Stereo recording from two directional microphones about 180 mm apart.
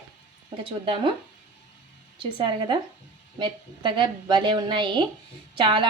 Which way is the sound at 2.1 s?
25° right (ahead or behind).